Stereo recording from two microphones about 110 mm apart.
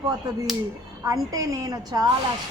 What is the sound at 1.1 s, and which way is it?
Speech, 30° right (ahead or behind).